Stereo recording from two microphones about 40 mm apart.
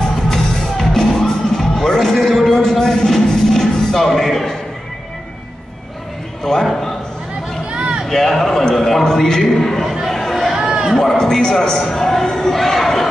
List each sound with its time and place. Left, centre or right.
0.3 s music: centre
6.4 s a man's voice: centre
7.7 s a sound: right
8.1 s a man's voice: centre
10.0 s chatter: centre
10.5 s a sound: centre
11.0 s a man's voice: centre